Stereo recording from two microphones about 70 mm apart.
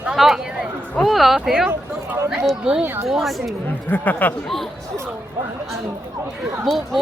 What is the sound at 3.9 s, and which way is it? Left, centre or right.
Speech, left.